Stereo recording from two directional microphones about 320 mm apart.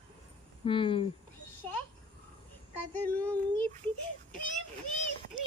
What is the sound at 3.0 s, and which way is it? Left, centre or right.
Child singing, centre.